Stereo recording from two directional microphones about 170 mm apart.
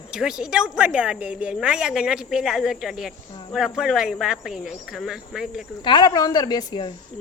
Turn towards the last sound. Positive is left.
turn(degrees=25)  # may be behind; listen again after turning